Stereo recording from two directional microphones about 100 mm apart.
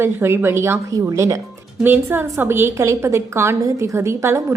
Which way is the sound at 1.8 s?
20° right (ahead or behind).